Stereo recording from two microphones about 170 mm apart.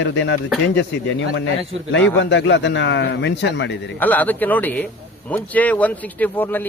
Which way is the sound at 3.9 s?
10° left (ahead or behind).